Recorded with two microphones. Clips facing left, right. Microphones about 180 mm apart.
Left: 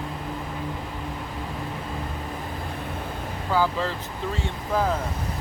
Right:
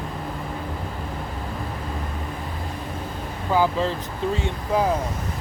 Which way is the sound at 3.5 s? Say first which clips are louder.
Right 3 dB; 20° right (ahead or behind).